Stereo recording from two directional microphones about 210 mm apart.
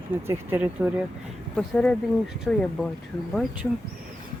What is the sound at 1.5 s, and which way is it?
Speech, 5° left (ahead or behind).